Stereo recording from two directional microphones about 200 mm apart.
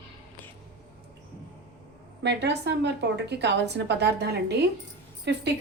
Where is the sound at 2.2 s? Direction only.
60° right (ahead or behind).